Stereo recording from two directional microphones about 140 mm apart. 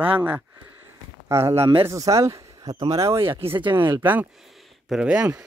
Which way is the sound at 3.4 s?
35° right (ahead or behind).